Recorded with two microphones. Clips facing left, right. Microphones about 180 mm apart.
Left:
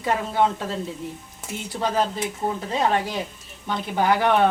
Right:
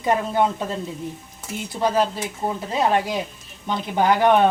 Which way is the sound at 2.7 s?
10° right (ahead or behind).